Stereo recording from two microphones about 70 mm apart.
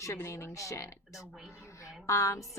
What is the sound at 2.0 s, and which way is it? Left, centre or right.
Speech, left.